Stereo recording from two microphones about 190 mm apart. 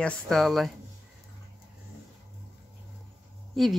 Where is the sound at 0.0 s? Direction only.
5° left (ahead or behind).